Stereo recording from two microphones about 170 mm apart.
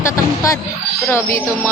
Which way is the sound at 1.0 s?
15° left (ahead or behind).